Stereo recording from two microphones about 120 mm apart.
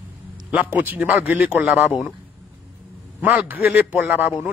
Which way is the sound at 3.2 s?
15° right (ahead or behind).